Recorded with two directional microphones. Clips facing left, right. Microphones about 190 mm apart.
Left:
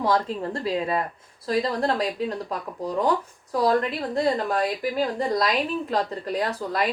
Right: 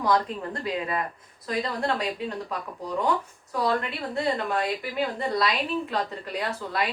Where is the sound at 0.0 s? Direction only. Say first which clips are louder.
Left 1 dB; 30° left (ahead or behind).